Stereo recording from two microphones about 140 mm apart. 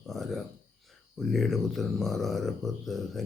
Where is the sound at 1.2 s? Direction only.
Centre (ahead or behind).